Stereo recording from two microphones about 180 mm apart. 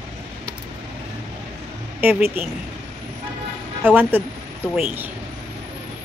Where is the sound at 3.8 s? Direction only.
10° right (ahead or behind).